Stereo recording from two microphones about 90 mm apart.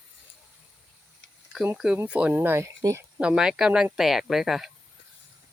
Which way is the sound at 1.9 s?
15° right (ahead or behind).